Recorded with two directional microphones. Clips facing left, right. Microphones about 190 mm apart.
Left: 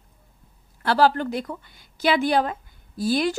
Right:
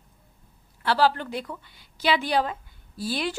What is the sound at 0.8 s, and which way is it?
A woman's voice, 45° left (ahead or behind).